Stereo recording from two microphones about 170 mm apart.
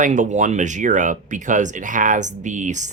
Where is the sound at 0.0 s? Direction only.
45° right (ahead or behind).